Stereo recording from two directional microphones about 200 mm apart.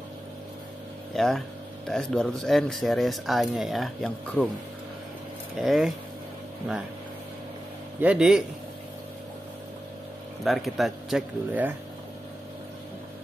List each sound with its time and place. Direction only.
1.1 s speech: centre (ahead or behind)
5.6 s speech: centre (ahead or behind)
8.0 s speech: 5° right (ahead or behind)
10.4 s speech: centre (ahead or behind)